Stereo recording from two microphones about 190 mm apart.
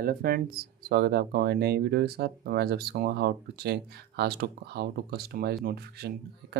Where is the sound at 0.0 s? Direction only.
50° right (ahead or behind).